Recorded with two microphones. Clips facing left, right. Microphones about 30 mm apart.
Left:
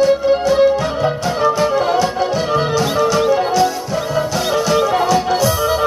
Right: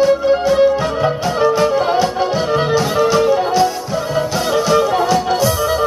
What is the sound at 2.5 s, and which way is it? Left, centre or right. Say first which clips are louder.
Music: right 1 dB; centre.